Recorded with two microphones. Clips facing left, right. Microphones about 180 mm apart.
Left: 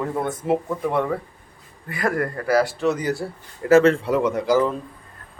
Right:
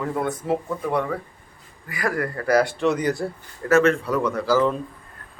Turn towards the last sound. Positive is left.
turn(degrees=20)  # may be behind; listen again after turning